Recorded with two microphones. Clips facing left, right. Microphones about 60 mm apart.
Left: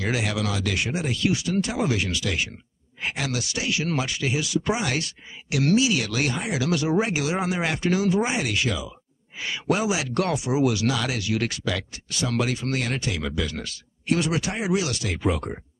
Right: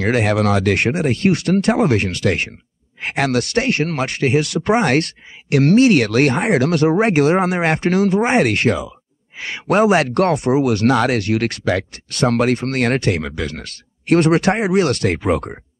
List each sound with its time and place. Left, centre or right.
0.0 s speech: right